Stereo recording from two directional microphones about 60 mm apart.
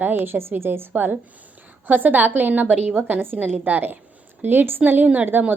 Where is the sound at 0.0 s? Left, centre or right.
Right.